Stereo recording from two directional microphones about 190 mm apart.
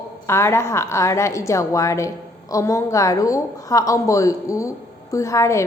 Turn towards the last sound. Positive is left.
turn(degrees=15)  # may be behind; listen again after turning